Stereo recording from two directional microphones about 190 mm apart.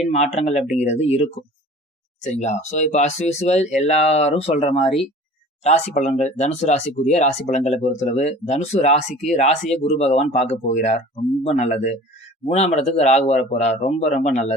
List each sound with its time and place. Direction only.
0.0 s speech: 35° left (ahead or behind)